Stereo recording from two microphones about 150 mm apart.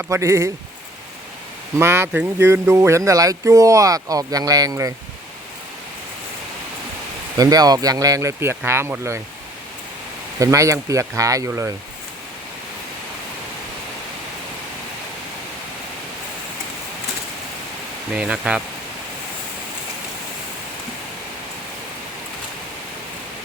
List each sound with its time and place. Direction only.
0.0 s speech: 20° right (ahead or behind)
1.8 s speech: 15° right (ahead or behind)
7.3 s speech: 25° right (ahead or behind)
10.4 s speech: 20° right (ahead or behind)
18.2 s speech: 5° right (ahead or behind)